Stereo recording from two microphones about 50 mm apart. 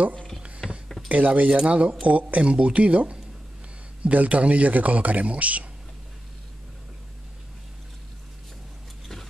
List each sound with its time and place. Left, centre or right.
0.6 s dishes: centre
1.0 s speech: right
1.5 s a man's voice: right
9.0 s a sound: centre